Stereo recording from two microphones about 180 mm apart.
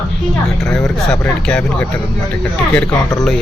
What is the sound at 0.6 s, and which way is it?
Speech, 5° left (ahead or behind).